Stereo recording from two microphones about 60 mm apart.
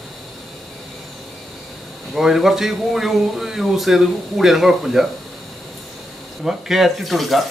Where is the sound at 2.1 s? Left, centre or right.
Centre.